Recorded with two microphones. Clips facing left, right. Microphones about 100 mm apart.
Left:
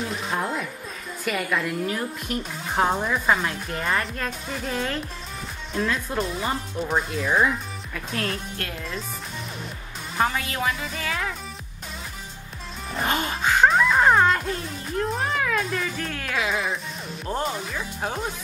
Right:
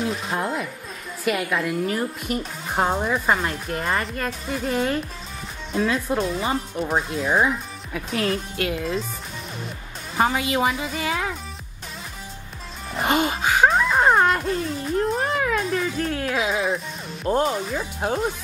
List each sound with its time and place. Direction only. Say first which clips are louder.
0.3 s a woman's voice: right 1 dB; centre (ahead or behind)
10.1 s a woman's voice: right 4 dB; 15° right (ahead or behind)
12.9 s music: right 4 dB; 10° right (ahead or behind)